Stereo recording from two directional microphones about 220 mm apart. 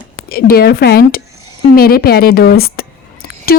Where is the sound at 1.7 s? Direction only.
45° left (ahead or behind).